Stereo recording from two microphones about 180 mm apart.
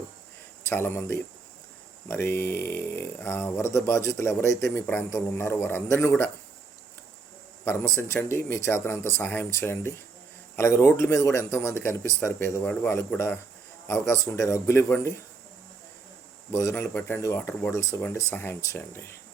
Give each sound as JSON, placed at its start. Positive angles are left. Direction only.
{"t": 0.7, "sound": "speech", "side_deg": 10}
{"t": 7.6, "sound": "speech", "side_deg": 15}
{"t": 16.5, "sound": "speech", "side_deg": 15}